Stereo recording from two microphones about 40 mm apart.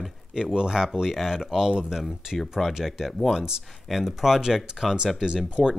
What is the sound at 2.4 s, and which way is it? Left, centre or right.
Speech, centre.